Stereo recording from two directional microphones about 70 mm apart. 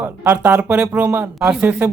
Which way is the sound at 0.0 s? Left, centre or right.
Right.